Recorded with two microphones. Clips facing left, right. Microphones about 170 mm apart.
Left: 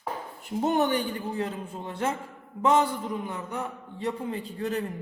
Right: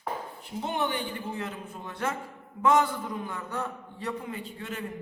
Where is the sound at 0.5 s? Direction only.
45° left (ahead or behind); by 4.0 s 20° left (ahead or behind).